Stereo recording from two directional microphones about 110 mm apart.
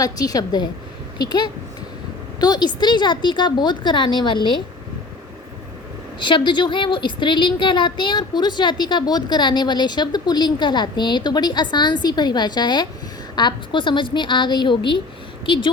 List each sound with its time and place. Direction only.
0.0 s a woman's voice: 35° left (ahead or behind)
6.1 s a woman's voice: 45° left (ahead or behind)